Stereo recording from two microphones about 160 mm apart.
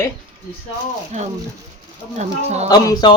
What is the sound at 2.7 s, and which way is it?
Speech, 25° left (ahead or behind).